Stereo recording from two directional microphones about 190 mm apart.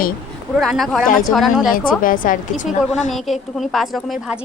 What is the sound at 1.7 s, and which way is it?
Speech, 45° left (ahead or behind).